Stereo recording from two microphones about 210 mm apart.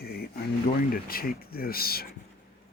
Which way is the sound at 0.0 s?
45° left (ahead or behind).